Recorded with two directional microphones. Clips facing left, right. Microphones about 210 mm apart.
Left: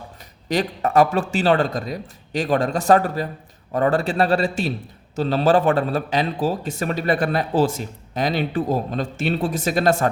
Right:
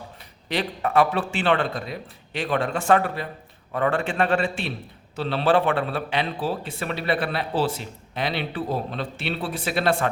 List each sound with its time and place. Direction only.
0.4 s a man's voice: 45° left (ahead or behind)